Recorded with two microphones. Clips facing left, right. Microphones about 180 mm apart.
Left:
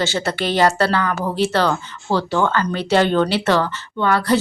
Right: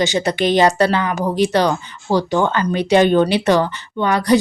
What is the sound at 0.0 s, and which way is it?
A woman's voice, 15° right (ahead or behind).